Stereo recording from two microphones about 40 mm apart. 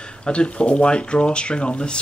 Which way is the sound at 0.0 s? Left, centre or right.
Left.